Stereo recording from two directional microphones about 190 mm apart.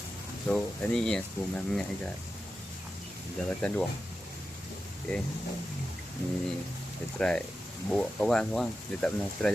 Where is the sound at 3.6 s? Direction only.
5° left (ahead or behind).